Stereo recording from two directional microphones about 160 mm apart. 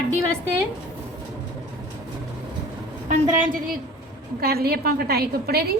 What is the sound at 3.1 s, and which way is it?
Speech, 55° right (ahead or behind).